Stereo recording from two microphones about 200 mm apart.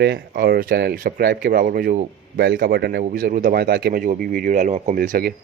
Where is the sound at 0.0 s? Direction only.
55° right (ahead or behind).